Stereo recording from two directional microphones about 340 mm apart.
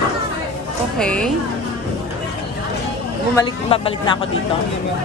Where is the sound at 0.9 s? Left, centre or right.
Centre.